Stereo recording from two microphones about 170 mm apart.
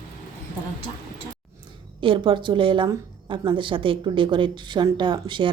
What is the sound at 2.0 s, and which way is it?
A woman's voice, 30° right (ahead or behind).